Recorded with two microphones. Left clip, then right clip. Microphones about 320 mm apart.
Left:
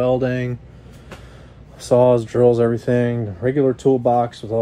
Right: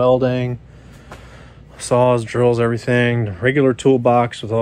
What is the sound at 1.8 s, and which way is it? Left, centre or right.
Speech, right.